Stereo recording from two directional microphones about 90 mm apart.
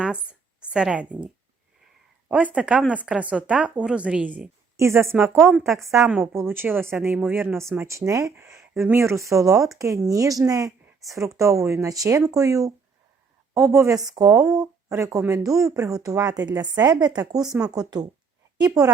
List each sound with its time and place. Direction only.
0.0 s a sound: 10° right (ahead or behind)
0.7 s a woman's voice: 10° right (ahead or behind)
2.3 s a woman's voice: 15° right (ahead or behind)
4.8 s speech: 30° right (ahead or behind)
5.4 s a woman's voice: 5° right (ahead or behind)
6.2 s speech: 25° right (ahead or behind)
7.8 s a woman's voice: 35° right (ahead or behind)